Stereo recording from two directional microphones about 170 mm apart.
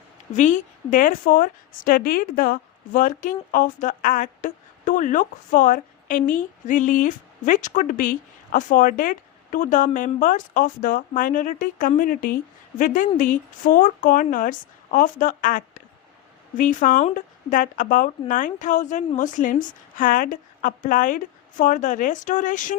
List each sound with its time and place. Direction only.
0.3 s a woman's voice: 45° left (ahead or behind)